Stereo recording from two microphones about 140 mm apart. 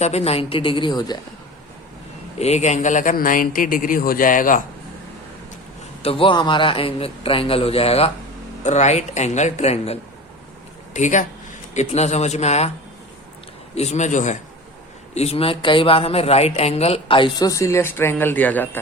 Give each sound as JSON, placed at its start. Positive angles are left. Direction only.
{"t": 0.0, "sound": "a man's voice", "side_deg": 50}
{"t": 2.4, "sound": "a man's voice", "side_deg": 55}
{"t": 6.0, "sound": "a man's voice", "side_deg": 40}
{"t": 8.6, "sound": "speech", "side_deg": 55}
{"t": 10.9, "sound": "a man's voice", "side_deg": 60}
{"t": 13.7, "sound": "speech", "side_deg": 55}
{"t": 15.1, "sound": "a man's voice", "side_deg": 50}
{"t": 17.5, "sound": "speech", "side_deg": 20}